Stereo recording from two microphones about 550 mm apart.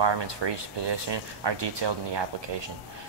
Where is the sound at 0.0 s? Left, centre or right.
Right.